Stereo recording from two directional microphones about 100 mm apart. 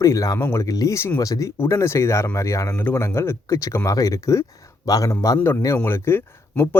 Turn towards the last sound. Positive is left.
turn(degrees=20)  # may be behind; listen again after turning